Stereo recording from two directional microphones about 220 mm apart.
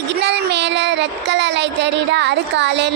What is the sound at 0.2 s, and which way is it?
Child singing, 50° right (ahead or behind).